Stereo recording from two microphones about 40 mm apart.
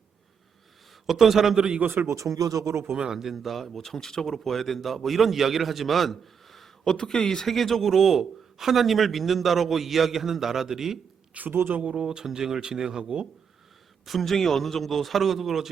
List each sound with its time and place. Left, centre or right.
1.0 s a man's voice: centre
1.5 s speech: right
2.3 s speech: right
2.9 s speech: centre
3.3 s a man's voice: centre
6.8 s a man's voice: centre
11.3 s speech: right
11.9 s speech: centre
14.0 s a man's voice: centre